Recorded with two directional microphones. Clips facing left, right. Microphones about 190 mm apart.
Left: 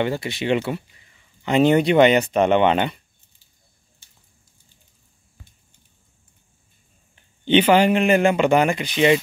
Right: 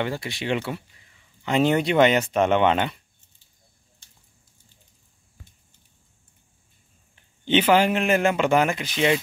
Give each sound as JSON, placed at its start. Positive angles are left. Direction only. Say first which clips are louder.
{"t": 0.0, "sound": "a man's voice", "louder": "left 5 dB", "side_deg": 0}
{"t": 7.4, "sound": "a man's voice", "louder": "left 3 dB", "side_deg": -5}